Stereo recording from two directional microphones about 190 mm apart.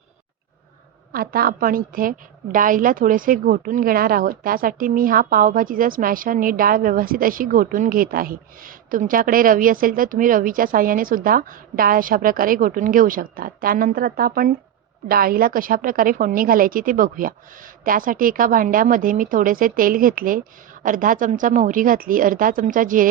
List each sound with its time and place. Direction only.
1.1 s a woman's voice: 50° right (ahead or behind)